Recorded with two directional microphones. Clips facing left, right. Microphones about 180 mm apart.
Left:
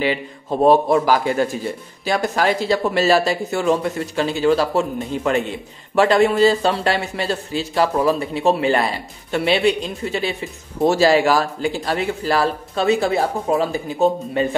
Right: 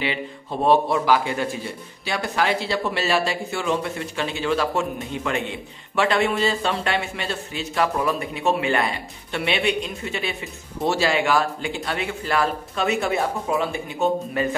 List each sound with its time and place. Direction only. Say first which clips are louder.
0.7 s speech: left 3 dB; 45° left (ahead or behind)